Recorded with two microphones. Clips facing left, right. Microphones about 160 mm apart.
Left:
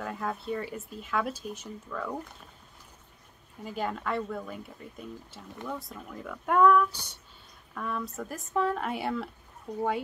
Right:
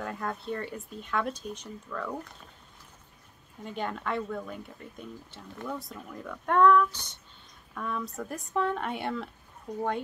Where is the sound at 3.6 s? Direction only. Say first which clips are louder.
Left 1 dB; 5° left (ahead or behind).